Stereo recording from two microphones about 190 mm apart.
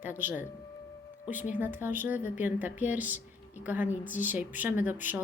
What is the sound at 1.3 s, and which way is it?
Speech, 45° left (ahead or behind).